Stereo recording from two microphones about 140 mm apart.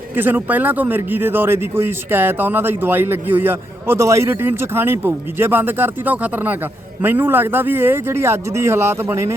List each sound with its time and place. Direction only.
0.2 s speech: 15° right (ahead or behind)